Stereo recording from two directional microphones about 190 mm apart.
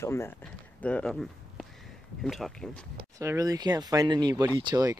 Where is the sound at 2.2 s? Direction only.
Centre (ahead or behind).